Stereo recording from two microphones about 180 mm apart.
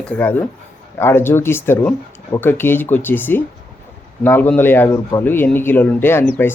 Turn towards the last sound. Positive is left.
turn(degrees=10)  # may be behind; listen again after turning